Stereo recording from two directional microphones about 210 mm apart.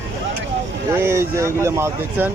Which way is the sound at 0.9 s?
10° right (ahead or behind).